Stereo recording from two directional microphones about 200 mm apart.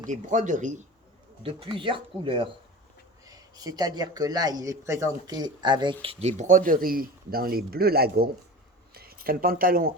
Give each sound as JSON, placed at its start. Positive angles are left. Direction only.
{"t": 0.0, "sound": "speech", "side_deg": -40}
{"t": 1.4, "sound": "speech", "side_deg": -25}